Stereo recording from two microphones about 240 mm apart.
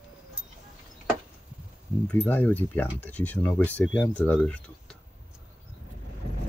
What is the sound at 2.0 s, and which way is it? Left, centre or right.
Speech, centre.